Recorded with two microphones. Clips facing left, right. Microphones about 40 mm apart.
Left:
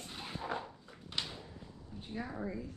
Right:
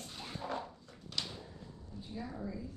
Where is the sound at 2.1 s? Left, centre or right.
Left.